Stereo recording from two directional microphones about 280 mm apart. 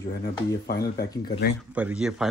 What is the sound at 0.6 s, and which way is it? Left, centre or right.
Speech, left.